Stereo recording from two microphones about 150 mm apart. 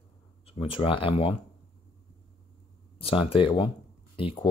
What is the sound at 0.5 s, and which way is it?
Speech, 35° left (ahead or behind).